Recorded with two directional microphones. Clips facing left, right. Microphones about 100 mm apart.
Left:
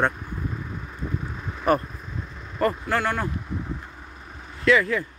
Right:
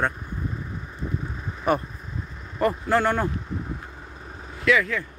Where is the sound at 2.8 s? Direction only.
25° right (ahead or behind).